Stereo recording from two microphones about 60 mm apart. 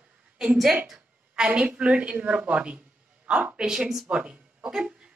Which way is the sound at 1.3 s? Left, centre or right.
Centre.